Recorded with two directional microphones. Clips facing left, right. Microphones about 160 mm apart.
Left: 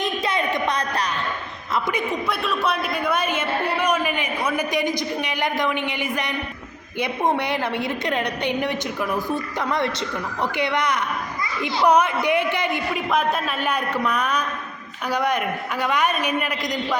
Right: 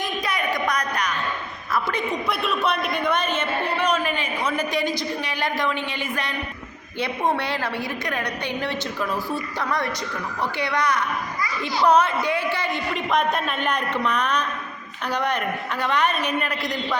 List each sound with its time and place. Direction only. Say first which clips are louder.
0.0 s music: left 3 dB; 25° left (ahead or behind)
1.7 s a sound: left 1 dB; 10° left (ahead or behind)
2.0 s a woman's voice: even; centre (ahead or behind); by 12.8 s 15° left (ahead or behind)
12.9 s a woman's voice: right 1 dB; 5° left (ahead or behind)